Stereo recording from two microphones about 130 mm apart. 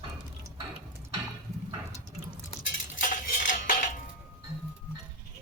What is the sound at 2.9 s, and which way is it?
Cutlery, 90° left.